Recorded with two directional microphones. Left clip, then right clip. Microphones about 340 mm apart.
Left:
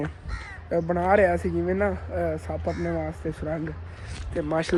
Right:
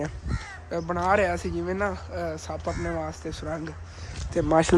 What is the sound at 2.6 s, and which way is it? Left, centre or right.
Speech, right.